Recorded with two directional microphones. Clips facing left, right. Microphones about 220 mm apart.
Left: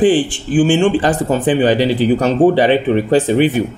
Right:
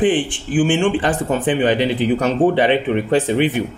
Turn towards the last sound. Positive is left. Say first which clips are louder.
# left 4 dB
turn(degrees=40)  # may be behind; listen again after turning